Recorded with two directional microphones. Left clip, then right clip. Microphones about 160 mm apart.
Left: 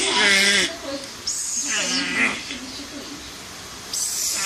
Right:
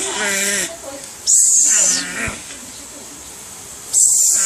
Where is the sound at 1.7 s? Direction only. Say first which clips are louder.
Right 7 dB; 15° right (ahead or behind).